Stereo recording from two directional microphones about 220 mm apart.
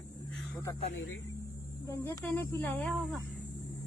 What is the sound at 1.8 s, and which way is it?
Speech, 15° left (ahead or behind).